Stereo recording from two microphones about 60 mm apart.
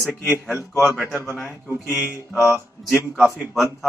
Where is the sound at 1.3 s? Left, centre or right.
Left.